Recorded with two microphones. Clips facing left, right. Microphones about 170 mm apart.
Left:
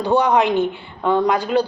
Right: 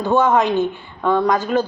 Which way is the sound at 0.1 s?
15° left (ahead or behind).